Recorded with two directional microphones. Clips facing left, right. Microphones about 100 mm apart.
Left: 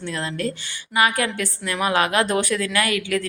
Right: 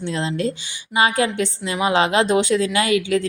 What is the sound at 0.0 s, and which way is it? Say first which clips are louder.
A woman's voice: right 4 dB; 25° right (ahead or behind).